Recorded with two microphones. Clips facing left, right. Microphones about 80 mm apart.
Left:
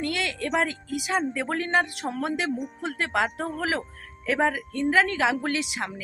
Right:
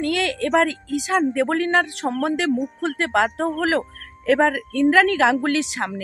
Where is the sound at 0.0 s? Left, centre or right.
Right.